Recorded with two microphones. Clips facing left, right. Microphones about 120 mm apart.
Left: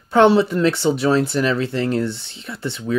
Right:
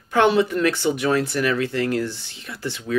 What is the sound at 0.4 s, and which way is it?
Speech, 25° left (ahead or behind).